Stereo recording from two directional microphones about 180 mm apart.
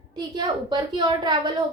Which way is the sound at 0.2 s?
25° right (ahead or behind).